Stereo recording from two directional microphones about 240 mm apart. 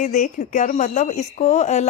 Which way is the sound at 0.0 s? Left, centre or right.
Left.